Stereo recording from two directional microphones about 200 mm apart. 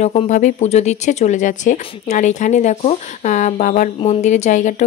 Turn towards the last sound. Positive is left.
turn(degrees=35)  # may be behind; listen again after turning